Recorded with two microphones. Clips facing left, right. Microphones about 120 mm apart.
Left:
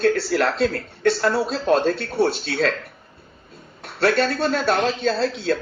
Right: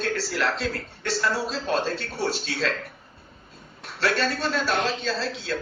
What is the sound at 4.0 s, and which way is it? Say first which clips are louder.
Speech: left 6 dB; 45° left (ahead or behind).